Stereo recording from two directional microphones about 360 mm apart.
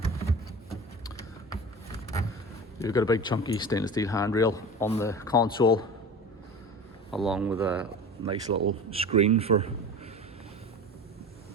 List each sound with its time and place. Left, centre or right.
0.7 s vehicle: centre
2.7 s speech: centre
7.1 s speech: centre
8.2 s a man's voice: centre